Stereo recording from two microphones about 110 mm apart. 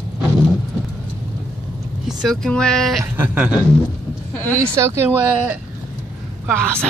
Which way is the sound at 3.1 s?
20° right (ahead or behind).